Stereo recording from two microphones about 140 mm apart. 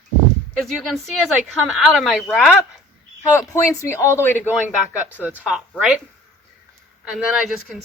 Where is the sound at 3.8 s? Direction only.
20° left (ahead or behind).